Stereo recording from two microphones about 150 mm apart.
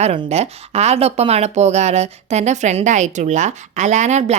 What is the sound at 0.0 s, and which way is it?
Speech, 40° right (ahead or behind).